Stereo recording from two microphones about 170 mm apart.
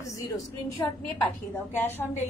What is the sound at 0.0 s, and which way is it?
Speech, 20° left (ahead or behind).